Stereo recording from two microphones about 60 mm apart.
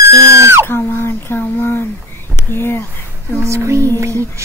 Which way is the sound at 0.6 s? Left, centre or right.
Left.